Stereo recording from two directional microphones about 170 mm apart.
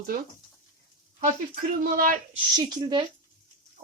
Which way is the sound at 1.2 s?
55° right (ahead or behind).